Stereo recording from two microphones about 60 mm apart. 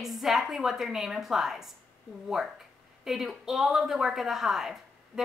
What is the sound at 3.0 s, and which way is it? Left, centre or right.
A woman's voice, centre.